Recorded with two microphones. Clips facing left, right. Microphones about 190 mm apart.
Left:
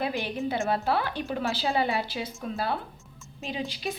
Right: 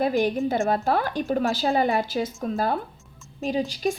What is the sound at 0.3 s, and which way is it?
A woman's voice, 45° right (ahead or behind).